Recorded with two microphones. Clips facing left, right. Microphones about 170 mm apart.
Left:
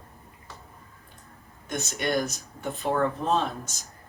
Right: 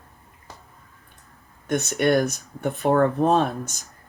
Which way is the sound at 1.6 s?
60° right (ahead or behind).